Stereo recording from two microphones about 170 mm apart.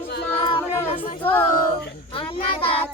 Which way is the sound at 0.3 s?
30° left (ahead or behind).